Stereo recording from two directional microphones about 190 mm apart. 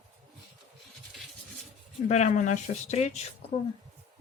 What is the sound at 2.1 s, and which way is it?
Speech, 40° left (ahead or behind).